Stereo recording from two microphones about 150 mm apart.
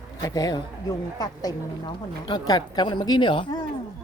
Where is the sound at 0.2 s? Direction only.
25° left (ahead or behind).